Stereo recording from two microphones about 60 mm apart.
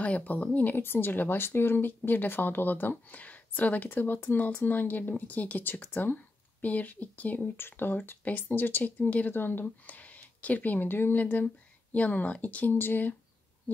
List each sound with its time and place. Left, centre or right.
0.0 s speech: left
0.6 s speech: left
8.5 s speech: left